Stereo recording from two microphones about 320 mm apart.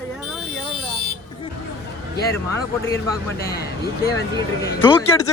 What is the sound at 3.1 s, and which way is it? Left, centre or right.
Speech, centre.